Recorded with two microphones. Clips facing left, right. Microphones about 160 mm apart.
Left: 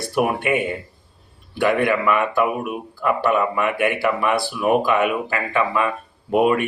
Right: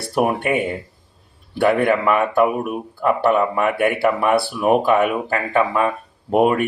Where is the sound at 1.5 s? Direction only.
35° right (ahead or behind).